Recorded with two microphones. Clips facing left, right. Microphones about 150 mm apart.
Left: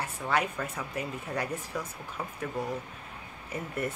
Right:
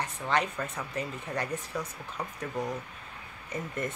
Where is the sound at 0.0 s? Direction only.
10° left (ahead or behind).